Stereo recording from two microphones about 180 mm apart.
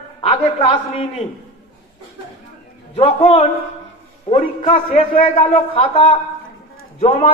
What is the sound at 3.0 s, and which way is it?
A man's voice, 30° left (ahead or behind).